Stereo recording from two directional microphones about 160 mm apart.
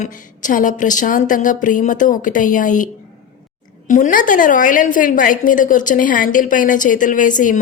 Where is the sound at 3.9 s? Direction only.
55° left (ahead or behind).